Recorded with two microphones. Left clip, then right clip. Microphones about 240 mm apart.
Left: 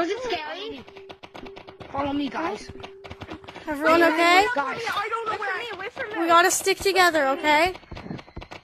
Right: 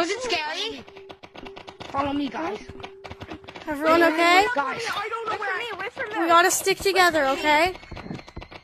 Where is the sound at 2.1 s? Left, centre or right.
Centre.